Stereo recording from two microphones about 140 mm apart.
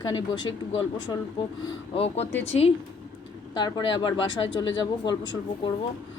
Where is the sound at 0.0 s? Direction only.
30° left (ahead or behind).